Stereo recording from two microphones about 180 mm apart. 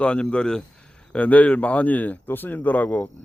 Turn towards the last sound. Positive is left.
turn(degrees=10)  # may be behind; listen again after turning